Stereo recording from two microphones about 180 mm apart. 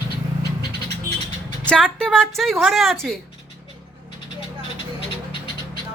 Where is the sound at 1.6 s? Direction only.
5° left (ahead or behind).